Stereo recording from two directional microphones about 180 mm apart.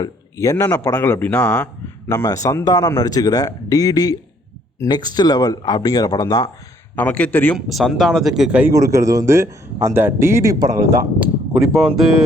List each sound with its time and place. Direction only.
0.0 s speech: 15° left (ahead or behind)
6.9 s speech: 10° left (ahead or behind)
7.7 s speech: centre (ahead or behind)
8.7 s a man's voice: 15° right (ahead or behind)